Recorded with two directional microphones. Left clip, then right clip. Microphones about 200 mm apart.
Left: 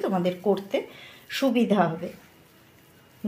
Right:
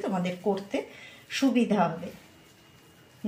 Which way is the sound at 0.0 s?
45° left (ahead or behind).